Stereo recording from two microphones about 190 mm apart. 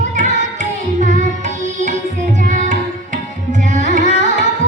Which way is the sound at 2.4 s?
40° right (ahead or behind).